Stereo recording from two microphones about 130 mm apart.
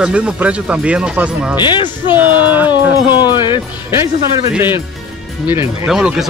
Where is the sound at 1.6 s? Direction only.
40° left (ahead or behind).